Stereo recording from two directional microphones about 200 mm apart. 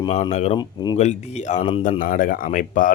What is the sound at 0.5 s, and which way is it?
Speech, 20° left (ahead or behind).